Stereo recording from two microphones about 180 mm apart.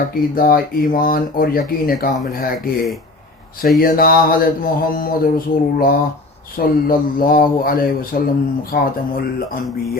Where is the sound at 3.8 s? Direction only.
55° left (ahead or behind).